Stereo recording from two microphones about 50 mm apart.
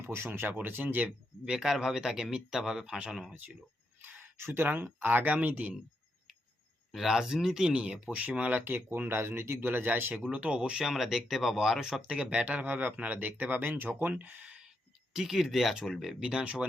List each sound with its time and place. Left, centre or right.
0.0 s speech: right
0.4 s speech: right
1.5 s speech: centre
3.3 s speech: right
6.9 s speech: centre
7.9 s speech: right
8.6 s speech: right
10.3 s speech: right
10.9 s speech: centre; by 14.5 s right
15.1 s speech: centre
16.2 s speech: centre